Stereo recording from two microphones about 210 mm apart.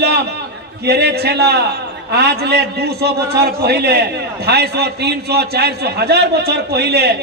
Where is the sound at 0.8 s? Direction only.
50° right (ahead or behind).